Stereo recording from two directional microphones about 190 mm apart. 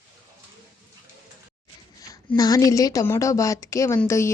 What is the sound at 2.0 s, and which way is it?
A woman's voice, 20° left (ahead or behind).